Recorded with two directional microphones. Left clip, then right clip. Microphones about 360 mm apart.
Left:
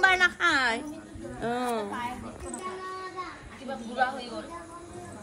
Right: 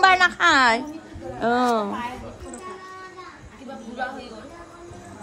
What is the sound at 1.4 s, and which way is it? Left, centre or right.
Speech, right.